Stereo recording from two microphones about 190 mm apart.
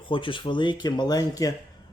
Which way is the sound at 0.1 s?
25° left (ahead or behind).